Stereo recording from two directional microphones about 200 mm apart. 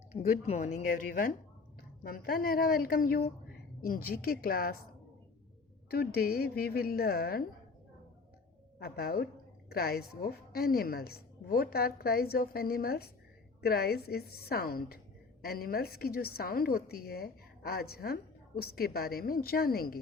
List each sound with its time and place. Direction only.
0.1 s a woman's voice: 35° left (ahead or behind)
5.9 s a woman's voice: 50° left (ahead or behind)
8.8 s a woman's voice: 50° left (ahead or behind)